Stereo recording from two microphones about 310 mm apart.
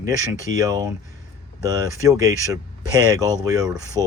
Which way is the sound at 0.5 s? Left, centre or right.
Centre.